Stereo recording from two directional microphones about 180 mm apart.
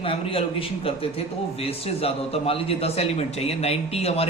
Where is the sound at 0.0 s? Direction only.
30° left (ahead or behind).